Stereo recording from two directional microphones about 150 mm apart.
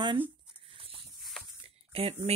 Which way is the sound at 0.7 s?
40° right (ahead or behind).